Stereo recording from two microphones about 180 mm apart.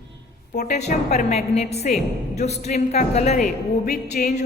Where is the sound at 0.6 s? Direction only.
40° left (ahead or behind).